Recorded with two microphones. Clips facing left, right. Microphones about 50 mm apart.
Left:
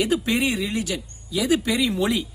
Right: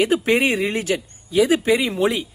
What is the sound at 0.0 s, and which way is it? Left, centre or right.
Speech, right.